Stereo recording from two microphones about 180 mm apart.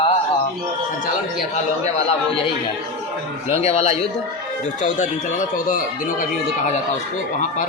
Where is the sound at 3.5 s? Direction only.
35° left (ahead or behind).